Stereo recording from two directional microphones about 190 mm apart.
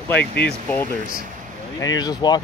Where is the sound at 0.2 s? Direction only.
60° left (ahead or behind).